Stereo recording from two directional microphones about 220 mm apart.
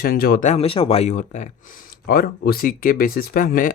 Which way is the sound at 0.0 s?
45° left (ahead or behind).